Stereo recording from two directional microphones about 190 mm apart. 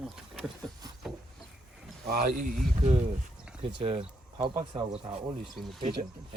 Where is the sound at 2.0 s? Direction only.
45° right (ahead or behind).